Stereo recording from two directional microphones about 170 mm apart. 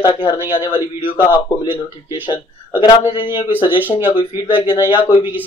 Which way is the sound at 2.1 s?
25° left (ahead or behind).